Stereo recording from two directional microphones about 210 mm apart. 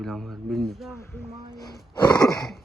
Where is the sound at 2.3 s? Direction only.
Centre (ahead or behind).